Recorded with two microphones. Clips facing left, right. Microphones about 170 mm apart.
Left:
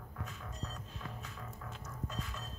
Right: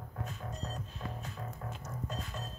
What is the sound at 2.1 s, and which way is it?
Music, 30° right (ahead or behind).